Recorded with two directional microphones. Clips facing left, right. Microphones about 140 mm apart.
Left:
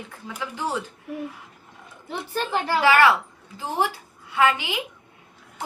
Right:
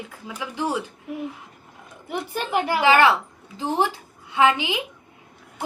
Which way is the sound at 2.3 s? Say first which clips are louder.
Even; 15° right (ahead or behind).